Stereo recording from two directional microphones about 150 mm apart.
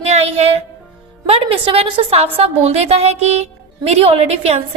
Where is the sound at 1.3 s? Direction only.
40° right (ahead or behind).